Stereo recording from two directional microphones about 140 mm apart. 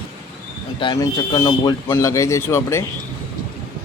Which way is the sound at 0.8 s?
25° left (ahead or behind).